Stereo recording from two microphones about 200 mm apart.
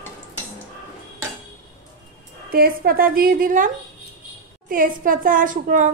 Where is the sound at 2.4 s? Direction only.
50° right (ahead or behind).